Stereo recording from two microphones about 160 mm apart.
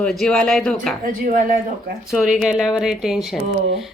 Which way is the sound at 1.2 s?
60° right (ahead or behind).